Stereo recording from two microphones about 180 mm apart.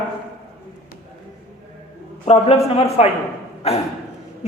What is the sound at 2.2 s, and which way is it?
Speech, 35° left (ahead or behind).